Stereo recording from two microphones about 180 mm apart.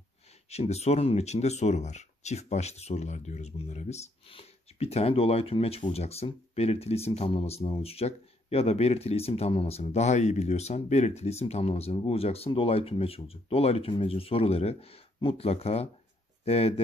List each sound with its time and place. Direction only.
0.5 s speech: 35° left (ahead or behind)